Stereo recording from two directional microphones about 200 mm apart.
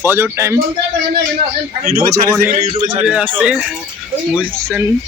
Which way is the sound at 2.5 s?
35° right (ahead or behind).